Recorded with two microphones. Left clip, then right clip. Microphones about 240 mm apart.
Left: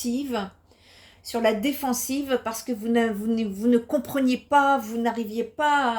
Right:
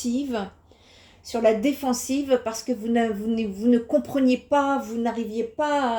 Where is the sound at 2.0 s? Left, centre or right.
Left.